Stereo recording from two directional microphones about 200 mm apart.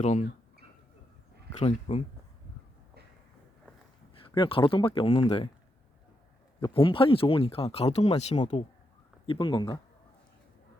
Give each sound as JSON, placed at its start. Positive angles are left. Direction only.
{"t": 0.0, "sound": "speech", "side_deg": 35}
{"t": 1.5, "sound": "speech", "side_deg": 30}
{"t": 4.4, "sound": "speech", "side_deg": 25}
{"t": 6.6, "sound": "speech", "side_deg": 25}